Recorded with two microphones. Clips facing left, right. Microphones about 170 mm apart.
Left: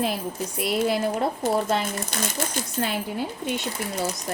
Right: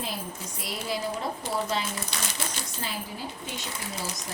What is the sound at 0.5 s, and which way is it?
Speech, 65° left (ahead or behind).